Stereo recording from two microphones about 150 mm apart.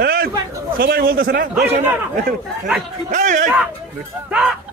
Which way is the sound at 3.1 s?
60° right (ahead or behind).